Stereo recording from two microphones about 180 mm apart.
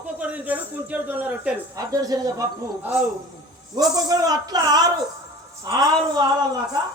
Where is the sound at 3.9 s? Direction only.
20° right (ahead or behind).